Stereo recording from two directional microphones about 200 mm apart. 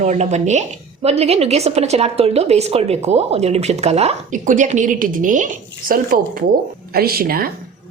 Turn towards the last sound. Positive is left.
turn(degrees=-50)  # may be behind; listen again after turning